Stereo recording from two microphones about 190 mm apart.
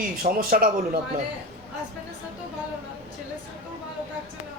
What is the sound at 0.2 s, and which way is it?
Speech, 50° right (ahead or behind).